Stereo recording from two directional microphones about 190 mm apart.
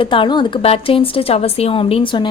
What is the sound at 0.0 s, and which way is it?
Speech, 25° left (ahead or behind).